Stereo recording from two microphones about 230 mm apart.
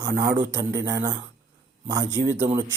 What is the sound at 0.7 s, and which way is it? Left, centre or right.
Speech, right.